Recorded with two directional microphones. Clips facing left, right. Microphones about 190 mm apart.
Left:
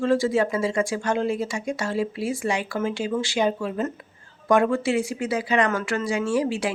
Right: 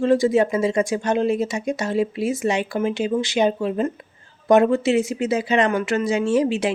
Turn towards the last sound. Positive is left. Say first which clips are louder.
# right 4 dB
turn(degrees=-20)  # may be behind; listen again after turning